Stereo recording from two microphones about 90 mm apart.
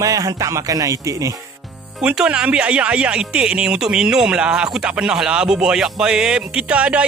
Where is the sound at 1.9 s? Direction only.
10° right (ahead or behind).